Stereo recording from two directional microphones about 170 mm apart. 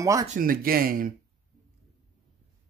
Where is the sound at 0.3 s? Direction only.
55° right (ahead or behind).